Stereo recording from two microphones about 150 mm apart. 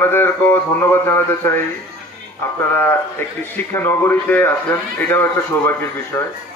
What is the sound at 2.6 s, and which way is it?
A man's voice, 15° left (ahead or behind).